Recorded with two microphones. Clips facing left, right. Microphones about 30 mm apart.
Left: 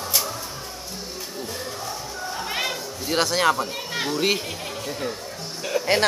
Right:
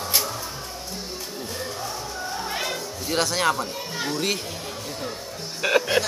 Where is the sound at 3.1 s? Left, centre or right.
Centre.